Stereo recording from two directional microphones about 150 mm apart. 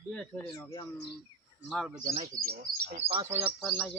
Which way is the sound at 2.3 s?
60° right (ahead or behind).